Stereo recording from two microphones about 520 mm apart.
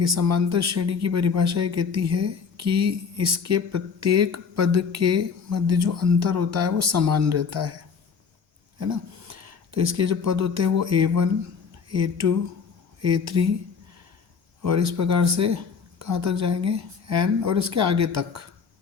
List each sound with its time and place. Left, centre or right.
0.0 s speech: right
8.8 s speech: right
14.6 s speech: right